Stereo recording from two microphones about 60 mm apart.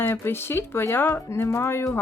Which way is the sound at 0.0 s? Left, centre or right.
Left.